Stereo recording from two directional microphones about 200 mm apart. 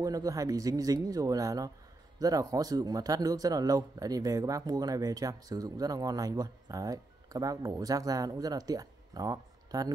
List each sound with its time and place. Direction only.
0.0 s speech: 15° right (ahead or behind)